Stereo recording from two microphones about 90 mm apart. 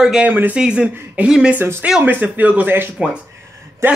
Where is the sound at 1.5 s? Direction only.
25° right (ahead or behind).